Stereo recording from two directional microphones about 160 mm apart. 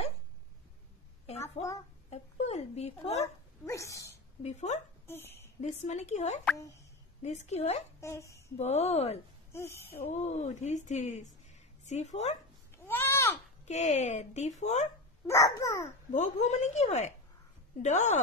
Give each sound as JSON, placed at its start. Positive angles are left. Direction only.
{"t": 2.0, "sound": "speech", "side_deg": 40}
{"t": 3.6, "sound": "speech", "side_deg": 20}
{"t": 4.4, "sound": "speech", "side_deg": 45}
{"t": 5.0, "sound": "a sound", "side_deg": 15}
{"t": 5.6, "sound": "speech", "side_deg": 45}
{"t": 8.0, "sound": "speech", "side_deg": 20}
{"t": 8.5, "sound": "speech", "side_deg": 40}
{"t": 9.5, "sound": "speech", "side_deg": 15}
{"t": 10.0, "sound": "a woman's voice", "side_deg": 45}
{"t": 12.7, "sound": "goat", "side_deg": 15}
{"t": 13.7, "sound": "speech", "side_deg": 45}
{"t": 15.2, "sound": "speech", "side_deg": 20}
{"t": 16.1, "sound": "speech", "side_deg": 45}